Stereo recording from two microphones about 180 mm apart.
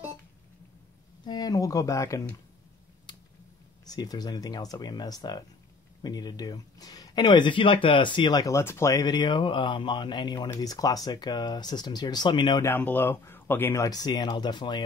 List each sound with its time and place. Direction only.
1.2 s speech: 20° left (ahead or behind)
3.1 s finger snapping: 25° left (ahead or behind)
3.8 s speech: 20° left (ahead or behind)
12.6 s speech: 10° left (ahead or behind)